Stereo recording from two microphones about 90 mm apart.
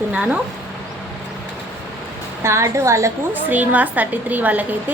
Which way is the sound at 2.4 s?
30° right (ahead or behind).